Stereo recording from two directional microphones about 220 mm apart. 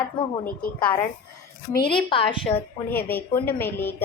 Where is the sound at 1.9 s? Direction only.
25° left (ahead or behind).